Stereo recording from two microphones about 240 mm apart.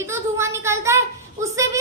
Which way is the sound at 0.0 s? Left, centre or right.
Centre.